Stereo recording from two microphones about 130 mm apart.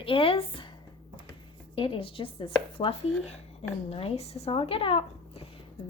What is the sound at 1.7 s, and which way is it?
Speech, 45° left (ahead or behind).